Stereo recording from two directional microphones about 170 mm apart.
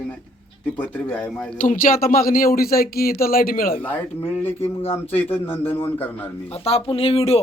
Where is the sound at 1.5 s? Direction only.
50° left (ahead or behind).